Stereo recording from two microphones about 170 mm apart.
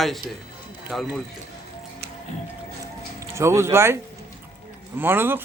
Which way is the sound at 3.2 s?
15° right (ahead or behind).